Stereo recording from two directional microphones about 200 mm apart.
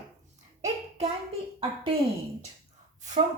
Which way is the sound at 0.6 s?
35° right (ahead or behind).